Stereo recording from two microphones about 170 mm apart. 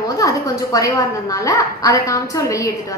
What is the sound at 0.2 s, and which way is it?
A woman's voice, 20° left (ahead or behind).